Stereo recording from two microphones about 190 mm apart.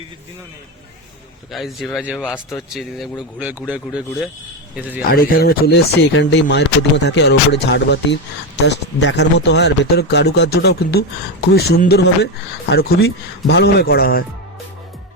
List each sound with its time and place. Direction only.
1.5 s a man's voice: centre (ahead or behind)
5.0 s speech: 50° left (ahead or behind)